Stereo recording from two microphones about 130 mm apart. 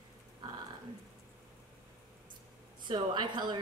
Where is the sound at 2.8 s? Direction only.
35° right (ahead or behind).